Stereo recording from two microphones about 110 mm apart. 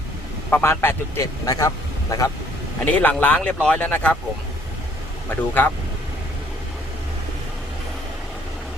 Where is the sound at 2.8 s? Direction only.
10° left (ahead or behind).